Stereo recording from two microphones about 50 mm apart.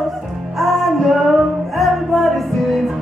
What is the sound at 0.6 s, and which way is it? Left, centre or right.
Music, centre.